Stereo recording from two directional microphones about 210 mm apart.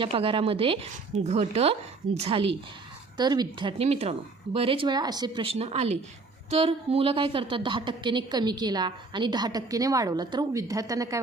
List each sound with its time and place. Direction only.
0.0 s a woman's voice: 25° right (ahead or behind)